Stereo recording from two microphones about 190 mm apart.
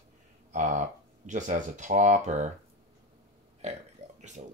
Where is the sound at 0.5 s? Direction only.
40° right (ahead or behind).